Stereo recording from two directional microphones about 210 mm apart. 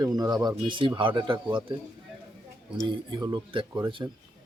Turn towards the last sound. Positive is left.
turn(degrees=-15)  # may be behind; listen again after turning